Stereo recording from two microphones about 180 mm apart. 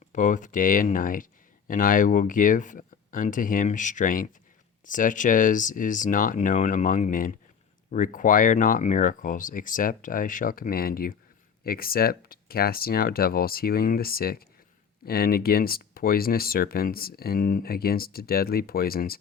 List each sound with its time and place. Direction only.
0.1 s speech: 45° left (ahead or behind)